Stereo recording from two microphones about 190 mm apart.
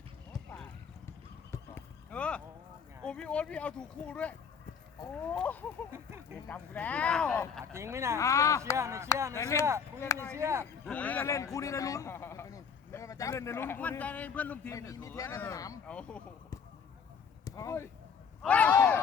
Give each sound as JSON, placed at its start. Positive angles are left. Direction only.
{"t": 0.3, "sound": "clip-clop", "side_deg": 5}
{"t": 1.5, "sound": "horse", "side_deg": 10}
{"t": 3.0, "sound": "a man's voice", "side_deg": 5}
{"t": 7.6, "sound": "speech", "side_deg": -15}
{"t": 8.2, "sound": "a man's voice", "side_deg": 15}
{"t": 8.7, "sound": "speech", "side_deg": -15}
{"t": 9.3, "sound": "a man's voice", "side_deg": 15}
{"t": 10.3, "sound": "speech", "side_deg": -15}
{"t": 10.8, "sound": "a man's voice", "side_deg": 10}
{"t": 15.9, "sound": "speech", "side_deg": 5}
{"t": 17.4, "sound": "a sound", "side_deg": 15}